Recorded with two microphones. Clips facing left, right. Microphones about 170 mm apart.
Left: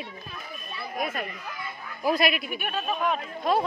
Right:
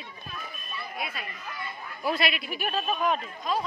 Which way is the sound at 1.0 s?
50° left (ahead or behind).